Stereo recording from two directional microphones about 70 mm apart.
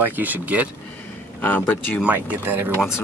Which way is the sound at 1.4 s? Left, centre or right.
Left.